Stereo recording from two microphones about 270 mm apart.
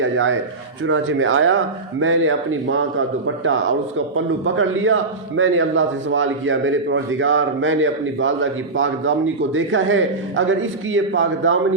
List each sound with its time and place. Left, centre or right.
0.0 s a man's voice: right